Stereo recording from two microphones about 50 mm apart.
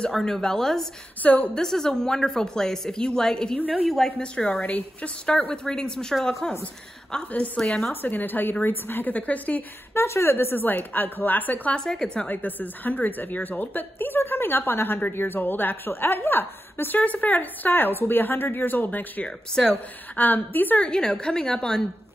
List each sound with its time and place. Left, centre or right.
0.2 s a woman's voice: centre
1.2 s a woman's voice: left
1.5 s a woman's voice: centre
4.2 s a woman's voice: left
7.6 s a woman's voice: centre
7.9 s a woman's voice: left
9.1 s a woman's voice: left
9.9 s a woman's voice: left
11.7 s a woman's voice: centre
12.3 s a woman's voice: left
17.0 s a woman's voice: left
19.2 s a woman's voice: centre
20.2 s a woman's voice: left
20.8 s a woman's voice: centre